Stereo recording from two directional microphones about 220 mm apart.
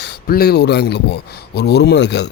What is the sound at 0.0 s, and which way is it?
Speech, 45° left (ahead or behind).